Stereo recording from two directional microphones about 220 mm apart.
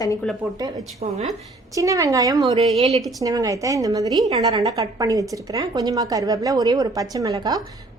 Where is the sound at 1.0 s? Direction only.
30° right (ahead or behind).